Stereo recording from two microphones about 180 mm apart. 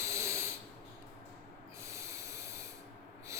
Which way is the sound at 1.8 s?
15° right (ahead or behind).